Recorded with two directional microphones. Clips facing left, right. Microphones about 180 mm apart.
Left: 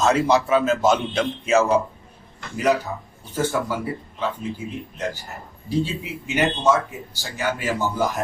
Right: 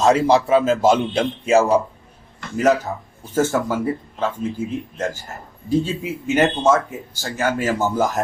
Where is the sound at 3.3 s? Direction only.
45° right (ahead or behind).